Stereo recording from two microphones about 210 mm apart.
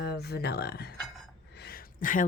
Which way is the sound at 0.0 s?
50° left (ahead or behind).